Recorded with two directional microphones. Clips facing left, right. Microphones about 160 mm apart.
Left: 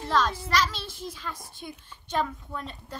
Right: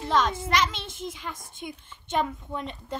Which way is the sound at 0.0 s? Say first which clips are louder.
Right 1 dB; 20° right (ahead or behind).